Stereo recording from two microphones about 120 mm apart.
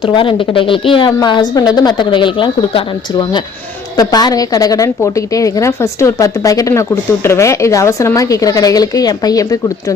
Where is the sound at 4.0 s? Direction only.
35° left (ahead or behind).